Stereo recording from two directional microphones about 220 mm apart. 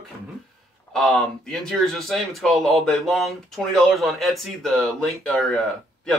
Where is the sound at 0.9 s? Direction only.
Centre (ahead or behind).